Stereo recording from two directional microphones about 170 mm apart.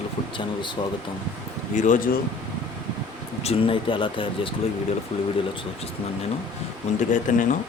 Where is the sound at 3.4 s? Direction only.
35° left (ahead or behind).